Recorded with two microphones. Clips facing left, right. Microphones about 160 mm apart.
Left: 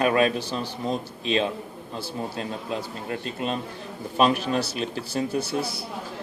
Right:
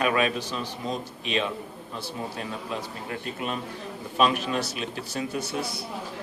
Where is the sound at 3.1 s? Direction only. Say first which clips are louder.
Left 3 dB; 30° left (ahead or behind).